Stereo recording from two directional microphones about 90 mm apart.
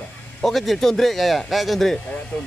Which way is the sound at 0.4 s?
Centre (ahead or behind).